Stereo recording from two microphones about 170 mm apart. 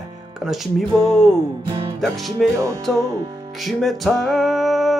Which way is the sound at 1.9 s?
Centre (ahead or behind).